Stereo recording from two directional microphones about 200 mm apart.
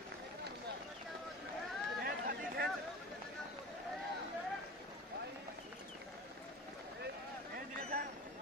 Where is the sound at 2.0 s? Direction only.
50° right (ahead or behind).